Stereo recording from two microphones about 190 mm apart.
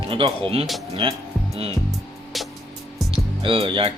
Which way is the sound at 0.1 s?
30° right (ahead or behind).